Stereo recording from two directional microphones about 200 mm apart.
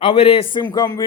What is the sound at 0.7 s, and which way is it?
Speech, 15° left (ahead or behind).